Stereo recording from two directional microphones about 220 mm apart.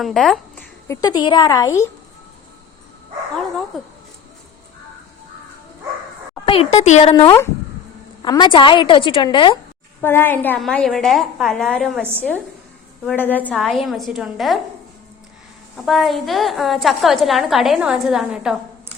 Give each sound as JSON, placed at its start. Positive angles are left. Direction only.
{"t": 0.0, "sound": "a woman's voice", "side_deg": 0}
{"t": 3.7, "sound": "a woman's voice", "side_deg": 0}
{"t": 6.4, "sound": "a woman's voice", "side_deg": 25}
{"t": 10.0, "sound": "a woman's voice", "side_deg": 10}
{"t": 13.1, "sound": "a woman's voice", "side_deg": 10}
{"t": 15.9, "sound": "a woman's voice", "side_deg": 0}